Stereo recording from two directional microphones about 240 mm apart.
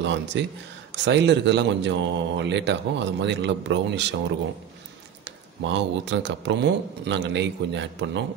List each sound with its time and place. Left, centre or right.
0.0 s speech: right
5.2 s speech: right